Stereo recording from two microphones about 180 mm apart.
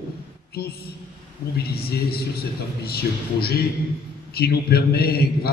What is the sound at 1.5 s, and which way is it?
Speech, 60° left (ahead or behind).